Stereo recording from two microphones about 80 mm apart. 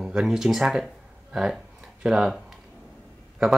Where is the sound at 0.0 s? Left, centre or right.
Centre.